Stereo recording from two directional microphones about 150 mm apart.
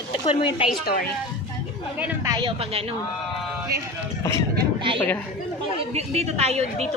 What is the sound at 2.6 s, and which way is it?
Speech, 40° right (ahead or behind).